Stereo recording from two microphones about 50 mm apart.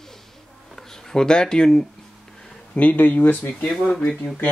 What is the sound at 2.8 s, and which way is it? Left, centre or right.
Speech, left.